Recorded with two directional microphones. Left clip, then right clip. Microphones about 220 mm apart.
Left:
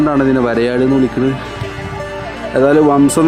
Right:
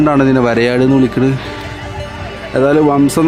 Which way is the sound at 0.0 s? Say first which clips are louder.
Right 2 dB; 20° right (ahead or behind).